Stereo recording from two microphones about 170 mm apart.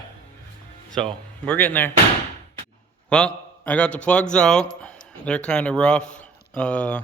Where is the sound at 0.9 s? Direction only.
5° left (ahead or behind).